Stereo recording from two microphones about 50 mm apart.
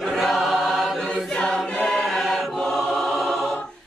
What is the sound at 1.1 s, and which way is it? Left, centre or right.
Choir, centre.